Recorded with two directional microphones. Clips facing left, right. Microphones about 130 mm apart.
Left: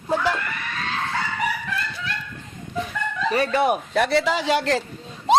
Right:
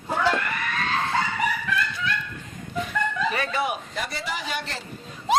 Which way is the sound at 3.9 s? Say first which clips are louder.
Left 11 dB; 75° left (ahead or behind).